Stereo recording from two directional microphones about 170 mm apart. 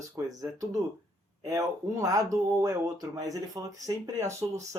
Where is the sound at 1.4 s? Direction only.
20° right (ahead or behind).